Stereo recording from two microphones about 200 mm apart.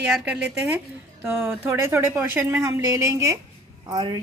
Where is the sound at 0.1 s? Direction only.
5° right (ahead or behind).